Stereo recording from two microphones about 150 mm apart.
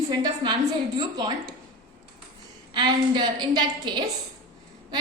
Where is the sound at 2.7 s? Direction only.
30° right (ahead or behind).